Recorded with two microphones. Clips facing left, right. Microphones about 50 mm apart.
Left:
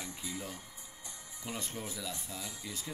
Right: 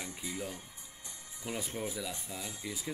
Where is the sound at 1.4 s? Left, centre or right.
Centre.